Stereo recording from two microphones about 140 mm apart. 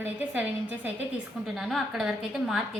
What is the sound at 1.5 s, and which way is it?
A woman's voice, centre (ahead or behind).